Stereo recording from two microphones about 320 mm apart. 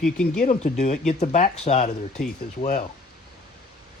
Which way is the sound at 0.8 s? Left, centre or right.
Left.